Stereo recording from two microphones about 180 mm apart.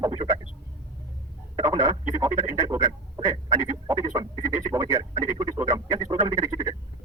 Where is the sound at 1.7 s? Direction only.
20° right (ahead or behind).